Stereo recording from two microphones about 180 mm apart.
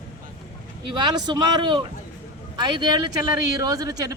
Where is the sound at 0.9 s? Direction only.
25° right (ahead or behind).